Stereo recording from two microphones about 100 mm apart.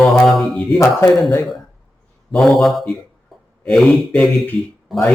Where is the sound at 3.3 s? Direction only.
Centre (ahead or behind).